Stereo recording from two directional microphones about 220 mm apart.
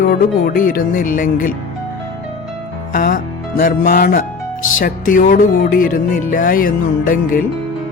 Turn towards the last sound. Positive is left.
turn(degrees=40)  # may be behind; listen again after turning